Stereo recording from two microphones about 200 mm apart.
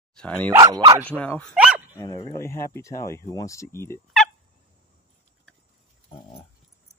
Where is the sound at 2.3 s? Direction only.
15° left (ahead or behind).